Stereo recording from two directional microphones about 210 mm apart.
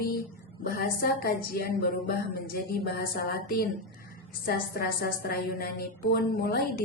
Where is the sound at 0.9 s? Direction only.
45° left (ahead or behind).